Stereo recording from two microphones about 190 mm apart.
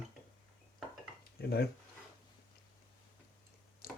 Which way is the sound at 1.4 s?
55° left (ahead or behind).